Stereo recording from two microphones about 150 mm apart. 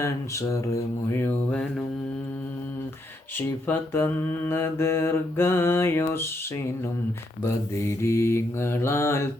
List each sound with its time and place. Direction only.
0.0 s mantra: 20° left (ahead or behind)
3.3 s mantra: 15° left (ahead or behind)
7.4 s mantra: 20° left (ahead or behind)